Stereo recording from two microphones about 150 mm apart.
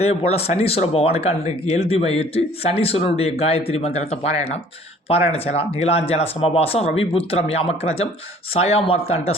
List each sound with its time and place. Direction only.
0.0 s speech: 45° left (ahead or behind)
5.3 s speech: 40° left (ahead or behind)